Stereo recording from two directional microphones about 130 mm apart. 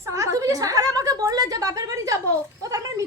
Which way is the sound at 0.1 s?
25° right (ahead or behind).